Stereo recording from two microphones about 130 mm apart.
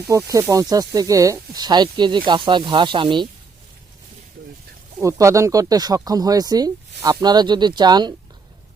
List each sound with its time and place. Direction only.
0.3 s speech: 25° right (ahead or behind)
4.9 s speech: 25° right (ahead or behind)